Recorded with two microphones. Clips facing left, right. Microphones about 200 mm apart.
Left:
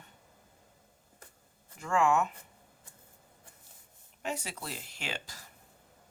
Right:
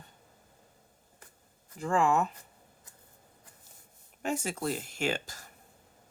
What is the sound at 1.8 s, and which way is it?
Speech, 35° right (ahead or behind).